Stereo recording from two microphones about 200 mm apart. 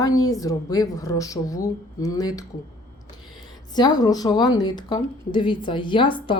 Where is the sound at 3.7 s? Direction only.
20° left (ahead or behind).